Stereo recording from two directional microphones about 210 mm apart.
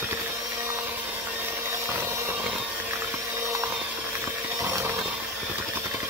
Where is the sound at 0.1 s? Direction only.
10° right (ahead or behind).